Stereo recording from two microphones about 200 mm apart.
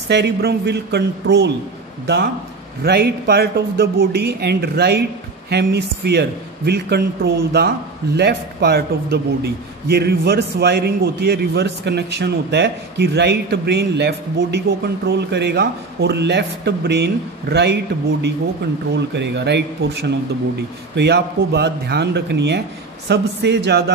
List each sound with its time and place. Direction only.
0.1 s a man's voice: 55° right (ahead or behind)
2.8 s a man's voice: 55° right (ahead or behind)